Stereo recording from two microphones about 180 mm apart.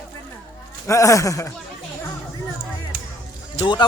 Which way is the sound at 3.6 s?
25° left (ahead or behind).